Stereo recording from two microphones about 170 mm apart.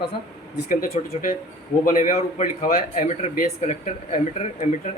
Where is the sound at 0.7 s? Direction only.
55° left (ahead or behind).